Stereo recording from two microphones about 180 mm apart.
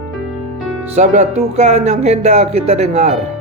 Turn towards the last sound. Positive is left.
turn(degrees=-40)  # may be behind; listen again after turning